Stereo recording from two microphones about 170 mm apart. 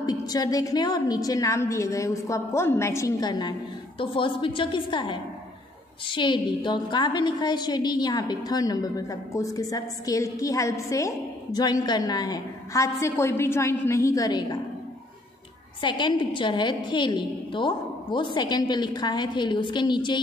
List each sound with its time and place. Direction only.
0.0 s a woman's voice: 20° left (ahead or behind)
15.8 s a woman's voice: 25° left (ahead or behind)